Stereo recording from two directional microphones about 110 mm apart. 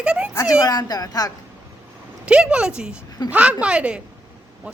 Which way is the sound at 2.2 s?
10° right (ahead or behind).